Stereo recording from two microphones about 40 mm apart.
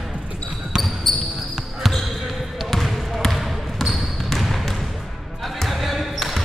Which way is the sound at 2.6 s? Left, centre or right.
Centre.